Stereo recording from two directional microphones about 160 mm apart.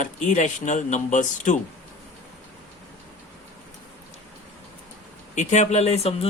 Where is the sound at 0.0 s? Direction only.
50° left (ahead or behind).